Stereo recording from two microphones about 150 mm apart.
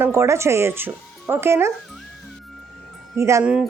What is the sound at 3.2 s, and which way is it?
Speech, 20° right (ahead or behind).